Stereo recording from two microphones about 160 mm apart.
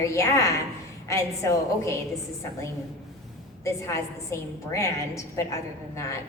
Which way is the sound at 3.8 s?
20° left (ahead or behind).